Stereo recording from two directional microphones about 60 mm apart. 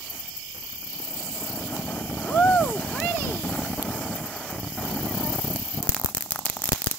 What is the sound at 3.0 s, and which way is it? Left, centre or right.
Vehicle, left.